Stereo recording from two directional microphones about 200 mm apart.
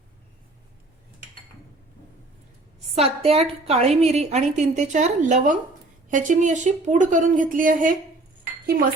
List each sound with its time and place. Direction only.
2.9 s a woman's voice: 30° right (ahead or behind); by 8.9 s 45° right (ahead or behind)